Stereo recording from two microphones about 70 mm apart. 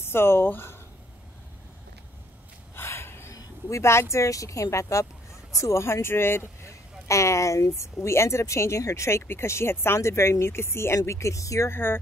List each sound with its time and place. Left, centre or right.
0.0 s speech: left
2.7 s a sound: left
3.6 s speech: left
6.6 s speech: left
11.7 s speech: left